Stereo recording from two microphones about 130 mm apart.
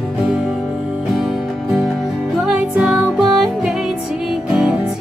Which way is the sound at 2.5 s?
5° right (ahead or behind).